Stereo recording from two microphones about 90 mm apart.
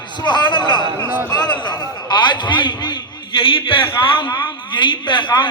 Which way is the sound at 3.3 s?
75° left (ahead or behind).